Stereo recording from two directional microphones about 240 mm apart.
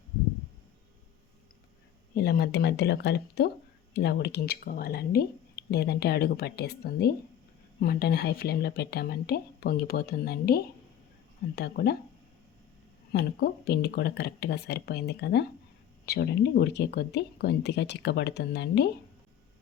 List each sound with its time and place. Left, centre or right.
2.1 s speech: left
13.1 s speech: left